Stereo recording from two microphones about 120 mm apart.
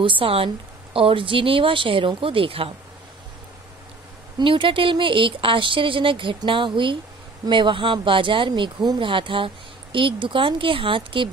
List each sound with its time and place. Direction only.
0.0 s speech: 45° right (ahead or behind)
4.4 s speech: 45° right (ahead or behind)